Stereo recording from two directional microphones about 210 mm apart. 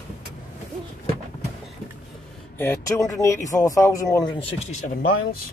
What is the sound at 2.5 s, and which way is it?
Speech, 15° left (ahead or behind).